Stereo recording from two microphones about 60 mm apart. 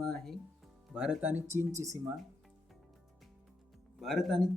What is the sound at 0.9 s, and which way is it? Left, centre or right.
Speech, centre.